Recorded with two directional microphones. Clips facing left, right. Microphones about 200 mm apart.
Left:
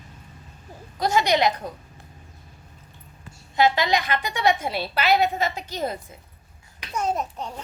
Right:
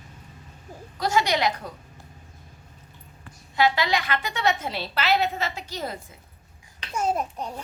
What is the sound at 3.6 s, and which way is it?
A woman's voice, 20° left (ahead or behind).